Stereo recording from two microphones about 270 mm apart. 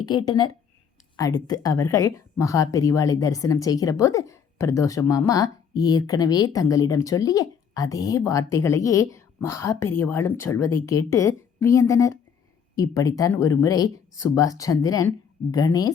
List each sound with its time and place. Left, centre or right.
0.3 s speech: centre